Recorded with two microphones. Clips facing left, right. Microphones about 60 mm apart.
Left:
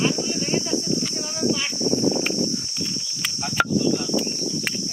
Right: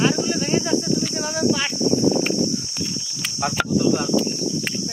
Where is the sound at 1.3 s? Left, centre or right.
Right.